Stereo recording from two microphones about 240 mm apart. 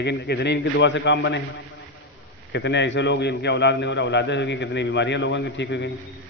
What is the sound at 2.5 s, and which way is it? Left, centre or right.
A man's voice, left.